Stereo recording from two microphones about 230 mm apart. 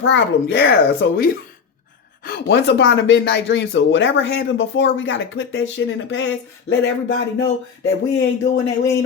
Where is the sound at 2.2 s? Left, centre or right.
Left.